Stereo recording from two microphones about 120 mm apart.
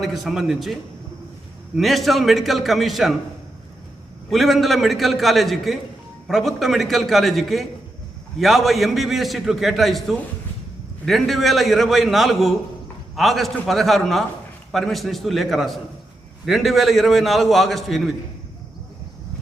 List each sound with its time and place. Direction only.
0.0 s a man's voice: centre (ahead or behind)
4.3 s a man's voice: centre (ahead or behind)